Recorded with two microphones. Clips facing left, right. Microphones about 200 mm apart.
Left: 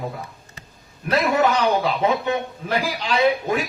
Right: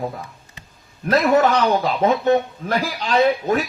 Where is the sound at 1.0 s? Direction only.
40° right (ahead or behind).